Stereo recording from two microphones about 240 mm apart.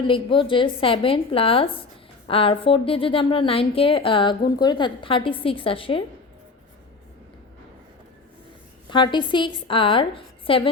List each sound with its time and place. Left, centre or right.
0.1 s speech: left
8.9 s a woman's voice: centre